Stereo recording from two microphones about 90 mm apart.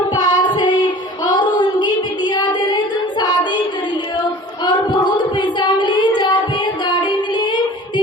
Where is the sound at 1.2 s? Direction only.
50° left (ahead or behind).